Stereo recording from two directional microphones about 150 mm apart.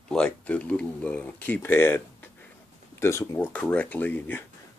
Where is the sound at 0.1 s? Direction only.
5° left (ahead or behind).